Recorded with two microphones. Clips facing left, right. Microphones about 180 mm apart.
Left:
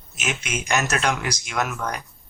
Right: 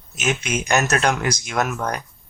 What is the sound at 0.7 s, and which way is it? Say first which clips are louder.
Speech: right 3 dB; 45° right (ahead or behind).